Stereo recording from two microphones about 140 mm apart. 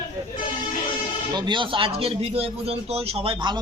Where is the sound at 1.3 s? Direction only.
35° right (ahead or behind).